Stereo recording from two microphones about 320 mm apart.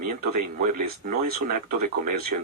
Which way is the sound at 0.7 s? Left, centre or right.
Right.